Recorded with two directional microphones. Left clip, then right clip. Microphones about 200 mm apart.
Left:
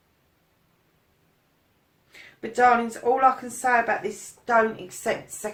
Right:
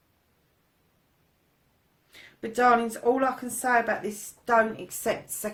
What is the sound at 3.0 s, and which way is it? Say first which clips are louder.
Speech: left 2 dB; 45° right (ahead or behind).